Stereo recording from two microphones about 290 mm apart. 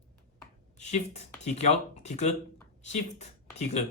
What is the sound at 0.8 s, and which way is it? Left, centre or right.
Speech, left.